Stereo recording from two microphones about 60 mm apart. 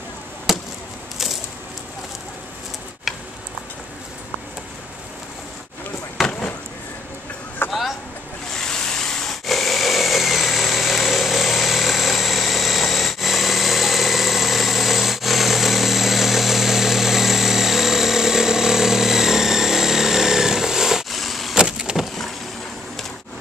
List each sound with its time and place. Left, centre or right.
0.5 s chop: centre
1.1 s a sound: centre
3.1 s tick-tock: centre
6.2 s vehicle: centre
7.6 s vehicle: left
8.5 s vehicle: centre
21.5 s vehicle: centre